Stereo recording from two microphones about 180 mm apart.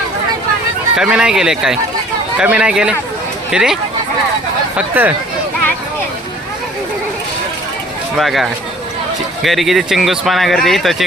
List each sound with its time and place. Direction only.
0.9 s speech: 5° right (ahead or behind)
4.8 s speech: 10° right (ahead or behind)
8.2 s speech: centre (ahead or behind)